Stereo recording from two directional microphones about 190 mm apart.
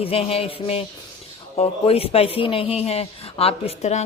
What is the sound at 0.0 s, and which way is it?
Speech, 30° left (ahead or behind).